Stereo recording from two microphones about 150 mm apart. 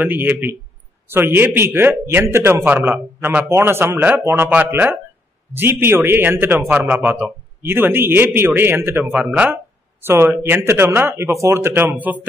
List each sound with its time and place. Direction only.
0.0 s a man's voice: 15° right (ahead or behind)